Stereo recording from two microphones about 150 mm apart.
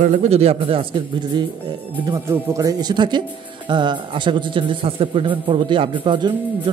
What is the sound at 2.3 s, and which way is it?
A man's voice, 20° right (ahead or behind).